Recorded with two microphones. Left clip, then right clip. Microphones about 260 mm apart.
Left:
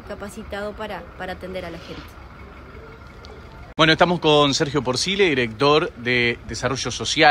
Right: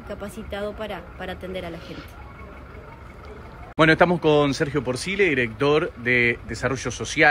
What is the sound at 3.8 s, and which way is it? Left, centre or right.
Speech, centre.